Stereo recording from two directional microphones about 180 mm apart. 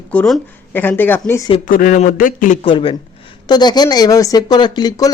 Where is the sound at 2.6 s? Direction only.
30° left (ahead or behind).